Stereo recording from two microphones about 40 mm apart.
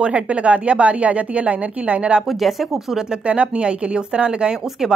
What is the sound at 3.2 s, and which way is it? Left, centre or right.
A woman's voice, right.